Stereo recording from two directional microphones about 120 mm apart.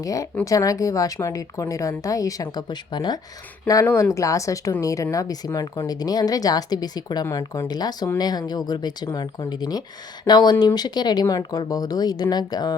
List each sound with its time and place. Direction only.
0.0 s a woman's voice: 30° left (ahead or behind)
3.8 s a woman's voice: 20° left (ahead or behind)